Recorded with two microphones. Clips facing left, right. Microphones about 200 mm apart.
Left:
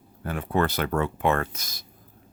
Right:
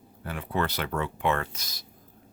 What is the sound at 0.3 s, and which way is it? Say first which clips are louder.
Speech: left 5 dB; 45° left (ahead or behind).